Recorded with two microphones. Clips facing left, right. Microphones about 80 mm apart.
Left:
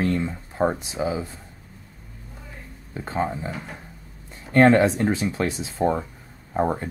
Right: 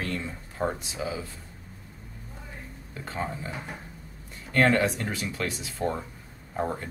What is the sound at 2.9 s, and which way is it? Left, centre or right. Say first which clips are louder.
Speech: left 7 dB; left.